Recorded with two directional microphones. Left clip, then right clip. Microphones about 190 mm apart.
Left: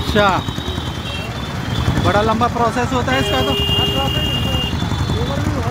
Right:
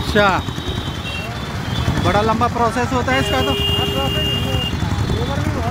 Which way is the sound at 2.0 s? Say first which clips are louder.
Left 1 dB; 5° right (ahead or behind).